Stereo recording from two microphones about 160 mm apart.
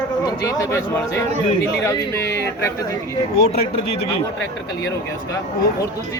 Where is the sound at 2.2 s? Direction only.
90° left.